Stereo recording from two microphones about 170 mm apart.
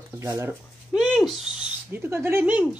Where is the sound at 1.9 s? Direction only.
15° right (ahead or behind).